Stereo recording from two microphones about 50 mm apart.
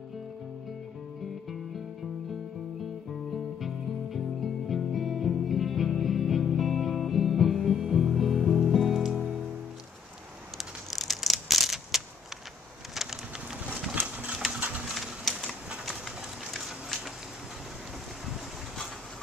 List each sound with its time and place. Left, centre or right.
3.6 s music: centre
10.6 s a sound: centre
12.9 s bird: centre
14.0 s clip-clop: right
15.0 s typewriter: centre
16.5 s a sound: centre